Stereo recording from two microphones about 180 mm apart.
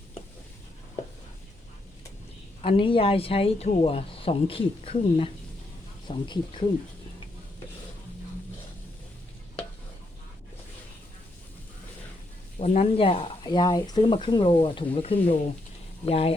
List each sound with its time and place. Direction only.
2.6 s speech: 30° left (ahead or behind)
12.5 s speech: 35° left (ahead or behind)